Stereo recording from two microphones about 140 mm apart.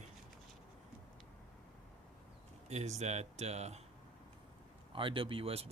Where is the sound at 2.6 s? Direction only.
55° right (ahead or behind).